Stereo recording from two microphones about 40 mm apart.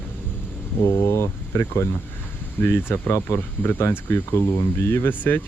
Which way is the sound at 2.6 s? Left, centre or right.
Left.